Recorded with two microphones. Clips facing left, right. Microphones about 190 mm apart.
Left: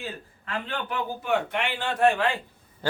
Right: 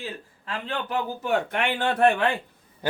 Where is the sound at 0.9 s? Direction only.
45° right (ahead or behind).